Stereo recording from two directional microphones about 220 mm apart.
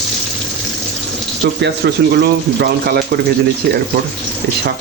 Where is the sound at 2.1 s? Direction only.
45° right (ahead or behind).